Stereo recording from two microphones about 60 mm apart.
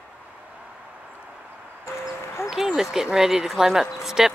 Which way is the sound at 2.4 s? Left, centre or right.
Left.